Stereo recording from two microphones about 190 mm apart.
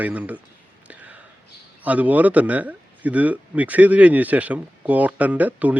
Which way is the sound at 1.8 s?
10° right (ahead or behind).